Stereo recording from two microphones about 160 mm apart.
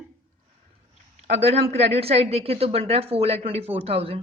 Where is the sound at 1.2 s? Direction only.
40° right (ahead or behind).